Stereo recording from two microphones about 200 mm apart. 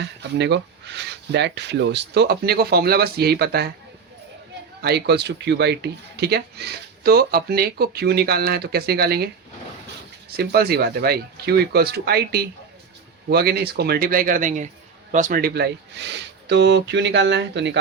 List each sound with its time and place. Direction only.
0.0 s speech: 60° right (ahead or behind)
4.8 s speech: 55° right (ahead or behind)
10.3 s speech: 50° right (ahead or behind)